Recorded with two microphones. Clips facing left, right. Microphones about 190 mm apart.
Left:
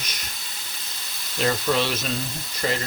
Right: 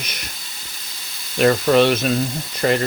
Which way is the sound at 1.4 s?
65° right (ahead or behind).